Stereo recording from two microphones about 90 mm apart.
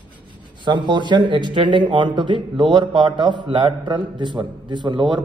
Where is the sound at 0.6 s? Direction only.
60° right (ahead or behind).